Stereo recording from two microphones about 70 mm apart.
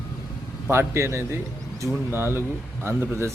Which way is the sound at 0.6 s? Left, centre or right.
Right.